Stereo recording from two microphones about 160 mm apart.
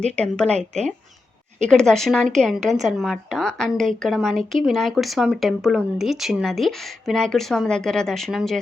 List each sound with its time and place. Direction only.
0.4 s a woman's voice: 45° right (ahead or behind)
1.6 s a woman's voice: 5° left (ahead or behind)